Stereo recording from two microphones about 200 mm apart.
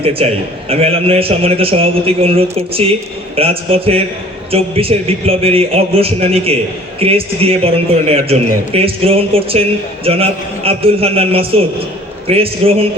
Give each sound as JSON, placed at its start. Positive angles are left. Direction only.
{"t": 0.0, "sound": "a man's voice", "side_deg": -30}